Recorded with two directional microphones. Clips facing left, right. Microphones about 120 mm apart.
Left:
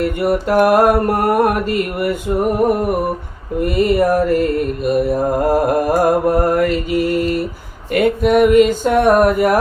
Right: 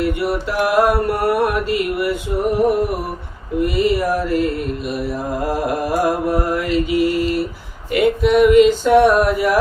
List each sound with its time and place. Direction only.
0.0 s mantra: 50° left (ahead or behind)